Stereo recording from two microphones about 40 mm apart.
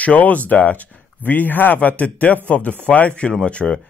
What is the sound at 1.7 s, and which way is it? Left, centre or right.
Speech, left.